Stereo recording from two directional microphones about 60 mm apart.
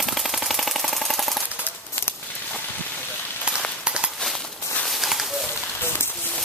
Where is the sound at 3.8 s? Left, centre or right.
Centre.